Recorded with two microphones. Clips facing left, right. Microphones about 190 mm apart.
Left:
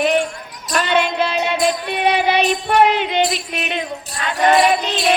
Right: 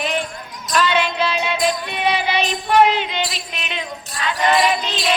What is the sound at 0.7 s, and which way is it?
Music, 50° left (ahead or behind).